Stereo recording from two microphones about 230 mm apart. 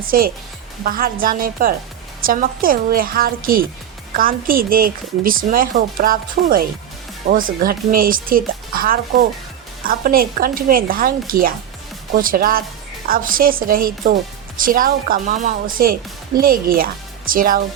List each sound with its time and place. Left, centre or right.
0.1 s a woman's voice: right